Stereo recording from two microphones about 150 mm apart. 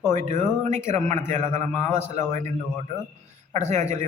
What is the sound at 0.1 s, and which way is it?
A man's voice, 50° right (ahead or behind).